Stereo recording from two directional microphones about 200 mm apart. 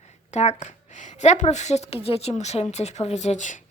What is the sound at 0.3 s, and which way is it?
A woman's voice, 35° left (ahead or behind).